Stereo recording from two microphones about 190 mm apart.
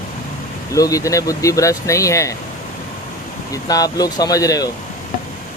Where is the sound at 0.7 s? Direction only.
15° left (ahead or behind).